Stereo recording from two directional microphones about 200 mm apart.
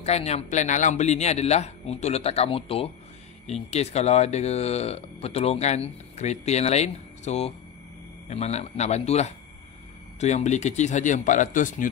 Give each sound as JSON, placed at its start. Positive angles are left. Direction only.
{"t": 0.0, "sound": "speech", "side_deg": 35}